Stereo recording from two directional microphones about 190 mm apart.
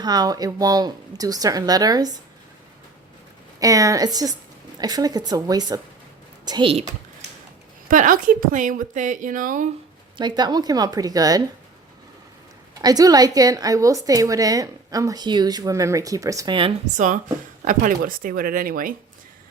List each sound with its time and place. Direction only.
0.0 s a woman's voice: 20° right (ahead or behind)
3.6 s a woman's voice: 20° right (ahead or behind)
7.9 s a woman's voice: 45° right (ahead or behind)
10.2 s a woman's voice: 20° right (ahead or behind)
12.8 s a woman's voice: 20° right (ahead or behind)
17.7 s a woman's voice: 45° right (ahead or behind)